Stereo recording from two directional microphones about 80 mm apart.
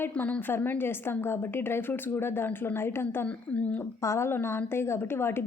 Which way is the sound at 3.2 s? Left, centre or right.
Centre.